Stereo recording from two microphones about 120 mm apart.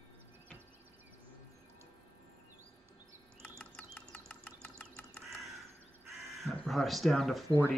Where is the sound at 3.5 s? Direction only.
10° left (ahead or behind).